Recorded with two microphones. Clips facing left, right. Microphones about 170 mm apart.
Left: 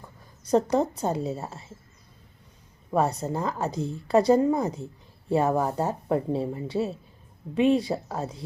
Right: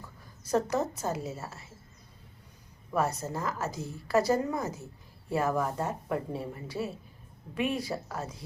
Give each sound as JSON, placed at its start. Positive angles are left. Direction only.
{"t": 0.5, "sound": "speech", "side_deg": 30}
{"t": 3.2, "sound": "speech", "side_deg": 25}